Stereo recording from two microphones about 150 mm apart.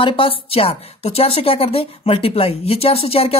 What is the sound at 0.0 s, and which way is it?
Speech, 35° left (ahead or behind).